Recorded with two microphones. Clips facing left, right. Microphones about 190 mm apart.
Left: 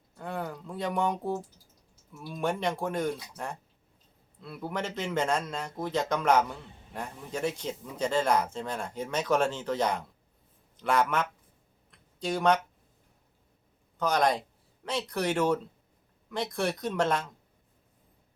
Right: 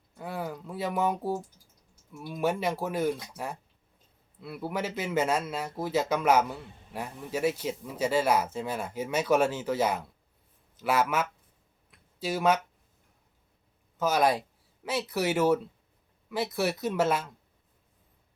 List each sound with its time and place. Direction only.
0.2 s a man's voice: 5° right (ahead or behind)
11.9 s a sound: 5° right (ahead or behind)
14.0 s a man's voice: 5° right (ahead or behind)